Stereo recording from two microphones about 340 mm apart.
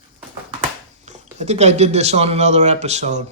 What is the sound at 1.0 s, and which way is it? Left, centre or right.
Speech, centre.